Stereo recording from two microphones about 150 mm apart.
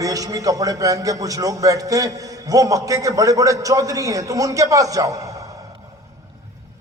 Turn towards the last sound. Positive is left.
turn(degrees=-20)  # may be behind; listen again after turning